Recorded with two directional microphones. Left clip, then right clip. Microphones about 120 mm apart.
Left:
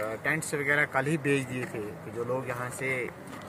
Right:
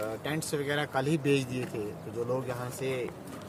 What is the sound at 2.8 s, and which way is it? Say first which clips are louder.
Speech: left 2 dB; 30° right (ahead or behind).